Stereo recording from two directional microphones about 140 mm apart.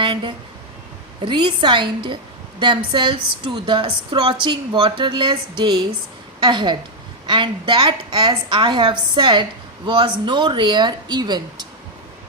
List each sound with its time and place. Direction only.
0.0 s a woman's voice: 35° right (ahead or behind)